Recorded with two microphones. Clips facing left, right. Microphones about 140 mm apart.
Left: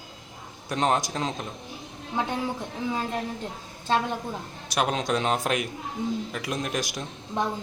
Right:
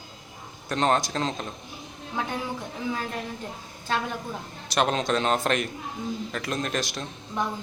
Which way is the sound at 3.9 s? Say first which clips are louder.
Left 4 dB; 25° left (ahead or behind).